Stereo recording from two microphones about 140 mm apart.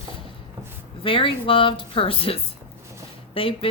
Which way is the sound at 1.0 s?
40° left (ahead or behind).